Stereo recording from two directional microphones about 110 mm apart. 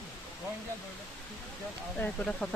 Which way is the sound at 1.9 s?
10° left (ahead or behind).